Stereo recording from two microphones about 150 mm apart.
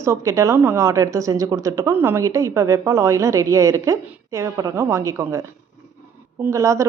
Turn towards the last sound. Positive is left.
turn(degrees=-20)  # may be behind; listen again after turning